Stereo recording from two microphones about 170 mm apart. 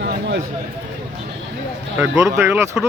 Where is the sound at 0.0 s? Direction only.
90° right.